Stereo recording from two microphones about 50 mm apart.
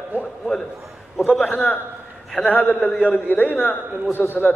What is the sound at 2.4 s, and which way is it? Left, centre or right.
A man's voice, left.